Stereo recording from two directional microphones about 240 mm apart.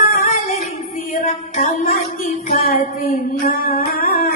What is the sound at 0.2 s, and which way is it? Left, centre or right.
Female singing, left.